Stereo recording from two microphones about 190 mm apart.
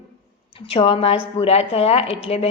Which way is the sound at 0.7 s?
30° left (ahead or behind).